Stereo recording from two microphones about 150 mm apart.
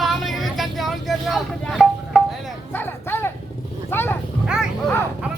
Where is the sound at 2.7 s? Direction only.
15° left (ahead or behind).